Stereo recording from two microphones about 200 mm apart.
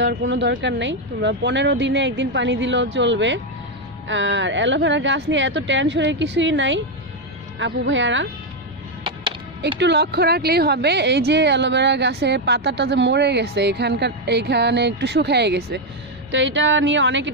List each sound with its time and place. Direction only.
0.0 s a woman's voice: 60° right (ahead or behind)
9.8 s speech: 60° right (ahead or behind)